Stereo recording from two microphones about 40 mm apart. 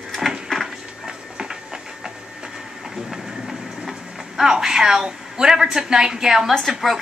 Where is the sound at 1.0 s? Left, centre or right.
Centre.